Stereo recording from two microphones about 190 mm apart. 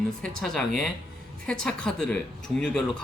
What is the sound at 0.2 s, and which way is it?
Speech, 5° left (ahead or behind).